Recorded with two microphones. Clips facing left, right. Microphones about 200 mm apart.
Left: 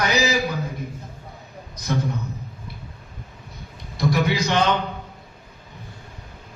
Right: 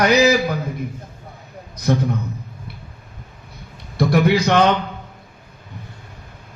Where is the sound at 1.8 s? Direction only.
60° right (ahead or behind).